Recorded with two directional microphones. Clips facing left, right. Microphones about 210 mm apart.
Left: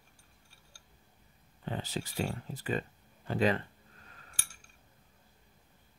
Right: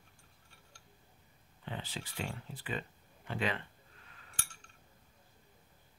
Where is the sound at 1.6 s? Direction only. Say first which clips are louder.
Left 6 dB; 40° left (ahead or behind).